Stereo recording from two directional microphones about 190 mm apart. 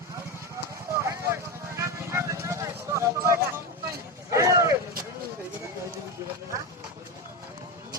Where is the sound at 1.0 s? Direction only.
15° right (ahead or behind).